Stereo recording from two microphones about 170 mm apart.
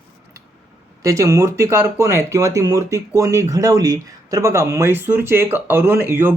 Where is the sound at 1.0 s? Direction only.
20° right (ahead or behind).